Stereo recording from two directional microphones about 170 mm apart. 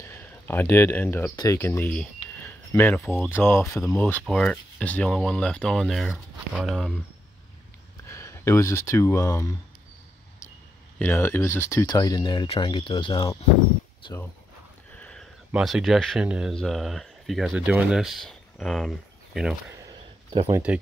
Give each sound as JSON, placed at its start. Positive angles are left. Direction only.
{"t": 0.0, "sound": "speech", "side_deg": 10}
{"t": 2.4, "sound": "a sound", "side_deg": 10}
{"t": 3.0, "sound": "speech", "side_deg": 10}
{"t": 8.1, "sound": "speech", "side_deg": 15}
{"t": 11.0, "sound": "speech", "side_deg": 15}
{"t": 15.0, "sound": "a sound", "side_deg": 5}
{"t": 15.5, "sound": "speech", "side_deg": 0}
{"t": 20.7, "sound": "speech", "side_deg": -10}